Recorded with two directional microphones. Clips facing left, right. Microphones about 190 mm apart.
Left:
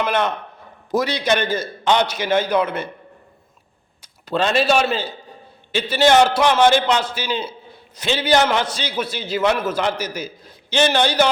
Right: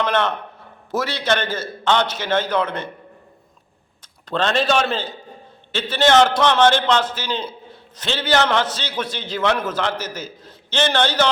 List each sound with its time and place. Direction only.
0.0 s a man's voice: 15° left (ahead or behind)
4.0 s a man's voice: 10° left (ahead or behind)